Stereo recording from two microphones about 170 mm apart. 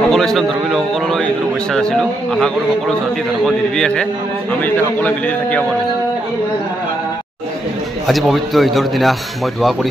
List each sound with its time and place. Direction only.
0.1 s a man's voice: centre (ahead or behind)
8.1 s a man's voice: centre (ahead or behind)